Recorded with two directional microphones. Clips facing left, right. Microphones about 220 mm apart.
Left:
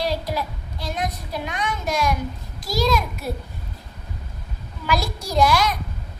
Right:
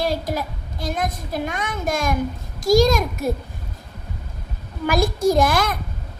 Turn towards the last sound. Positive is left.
turn(degrees=-50)  # may be behind; listen again after turning